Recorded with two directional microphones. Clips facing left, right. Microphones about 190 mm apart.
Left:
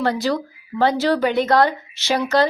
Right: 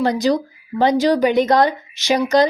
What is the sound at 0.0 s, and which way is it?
Speech, 15° right (ahead or behind).